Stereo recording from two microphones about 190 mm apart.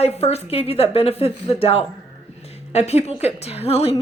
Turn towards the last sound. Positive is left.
turn(degrees=30)  # may be behind; listen again after turning